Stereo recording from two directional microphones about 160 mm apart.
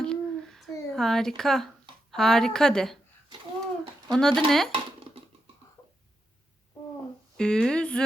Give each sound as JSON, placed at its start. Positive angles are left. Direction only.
{"t": 0.0, "sound": "a sound", "side_deg": 5}
{"t": 4.1, "sound": "speech", "side_deg": 5}
{"t": 4.7, "sound": "dishes", "side_deg": -35}
{"t": 7.3, "sound": "speech", "side_deg": 5}